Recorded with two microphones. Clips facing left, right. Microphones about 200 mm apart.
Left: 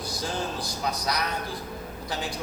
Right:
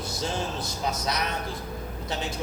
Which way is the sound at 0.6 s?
25° right (ahead or behind).